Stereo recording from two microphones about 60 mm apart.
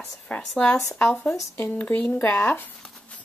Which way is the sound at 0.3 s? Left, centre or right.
Centre.